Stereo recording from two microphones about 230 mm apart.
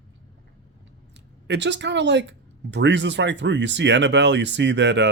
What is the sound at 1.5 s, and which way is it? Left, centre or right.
Speech, right.